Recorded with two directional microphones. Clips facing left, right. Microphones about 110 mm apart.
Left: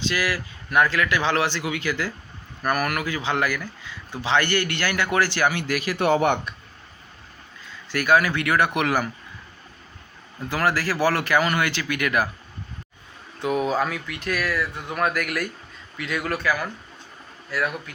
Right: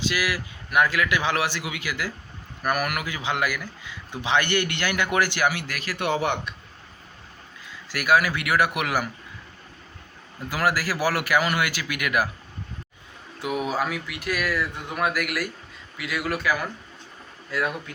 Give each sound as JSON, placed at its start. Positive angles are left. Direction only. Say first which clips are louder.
{"t": 0.0, "sound": "speech", "louder": "left 1 dB", "side_deg": -10}
{"t": 6.0, "sound": "speech", "louder": "left 4 dB", "side_deg": 50}
{"t": 7.9, "sound": "speech", "louder": "left 2 dB", "side_deg": -10}
{"t": 10.5, "sound": "speech", "louder": "left 1 dB", "side_deg": -10}
{"t": 13.4, "sound": "speech", "louder": "left 3 dB", "side_deg": -10}